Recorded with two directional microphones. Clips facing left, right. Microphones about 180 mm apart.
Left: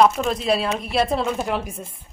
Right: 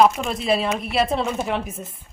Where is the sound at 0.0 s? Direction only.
5° right (ahead or behind).